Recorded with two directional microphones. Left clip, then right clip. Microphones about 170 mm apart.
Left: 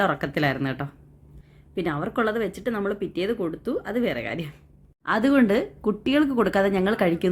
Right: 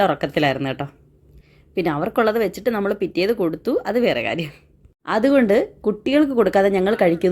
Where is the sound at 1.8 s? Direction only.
30° right (ahead or behind).